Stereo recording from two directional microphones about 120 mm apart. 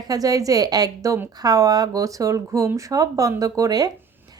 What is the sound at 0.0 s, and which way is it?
Speech, 30° right (ahead or behind).